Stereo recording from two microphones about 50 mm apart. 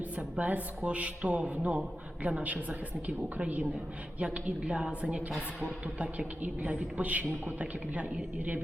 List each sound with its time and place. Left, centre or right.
0.2 s a woman's voice: right